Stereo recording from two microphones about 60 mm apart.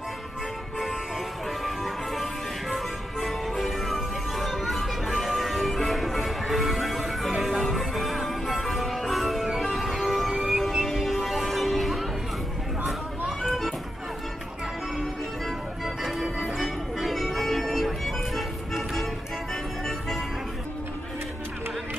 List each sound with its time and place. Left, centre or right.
1.6 s music: centre
13.4 s music: centre
15.4 s organ: centre
16.5 s music: centre